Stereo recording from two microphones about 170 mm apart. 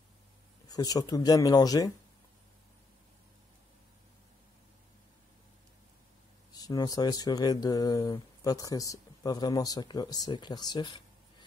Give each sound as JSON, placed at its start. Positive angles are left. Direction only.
{"t": 0.7, "sound": "speech", "side_deg": 20}
{"t": 6.5, "sound": "speech", "side_deg": 20}